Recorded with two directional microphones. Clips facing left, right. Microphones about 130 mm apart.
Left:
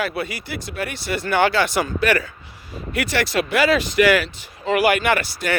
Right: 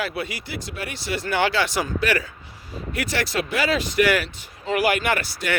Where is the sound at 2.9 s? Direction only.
75° left (ahead or behind).